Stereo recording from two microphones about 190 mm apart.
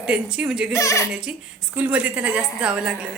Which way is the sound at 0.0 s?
5° right (ahead or behind).